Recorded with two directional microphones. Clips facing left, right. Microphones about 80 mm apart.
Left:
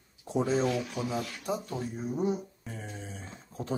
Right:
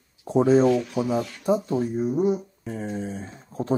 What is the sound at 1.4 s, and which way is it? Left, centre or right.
Speech, right.